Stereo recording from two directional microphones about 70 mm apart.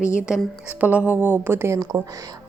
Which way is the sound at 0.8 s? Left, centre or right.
Right.